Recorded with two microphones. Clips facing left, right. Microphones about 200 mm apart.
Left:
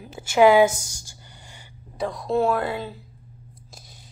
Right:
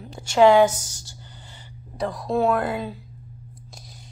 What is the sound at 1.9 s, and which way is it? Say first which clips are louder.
A woman's voice: left 1 dB; centre (ahead or behind).